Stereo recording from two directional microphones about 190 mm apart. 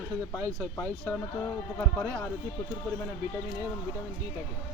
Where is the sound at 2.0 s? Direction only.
5° left (ahead or behind).